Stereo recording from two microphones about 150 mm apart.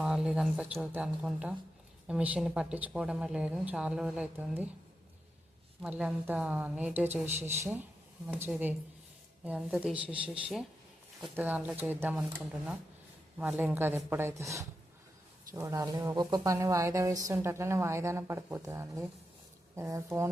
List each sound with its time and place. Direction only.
0.0 s a woman's voice: 5° right (ahead or behind)
5.8 s a woman's voice: 10° right (ahead or behind)
13.4 s a woman's voice: 10° right (ahead or behind)